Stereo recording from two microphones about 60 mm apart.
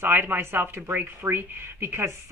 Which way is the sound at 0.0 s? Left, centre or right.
Right.